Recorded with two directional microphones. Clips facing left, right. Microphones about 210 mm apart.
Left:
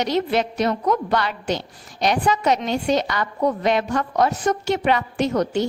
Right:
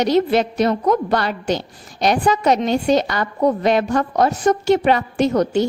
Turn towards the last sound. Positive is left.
turn(degrees=-35)  # may be behind; listen again after turning